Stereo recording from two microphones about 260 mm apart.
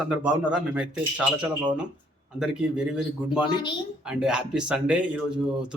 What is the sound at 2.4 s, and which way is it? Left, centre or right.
Speech, centre.